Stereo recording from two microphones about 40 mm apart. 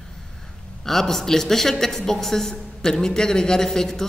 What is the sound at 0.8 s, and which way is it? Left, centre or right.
A woman's voice, centre.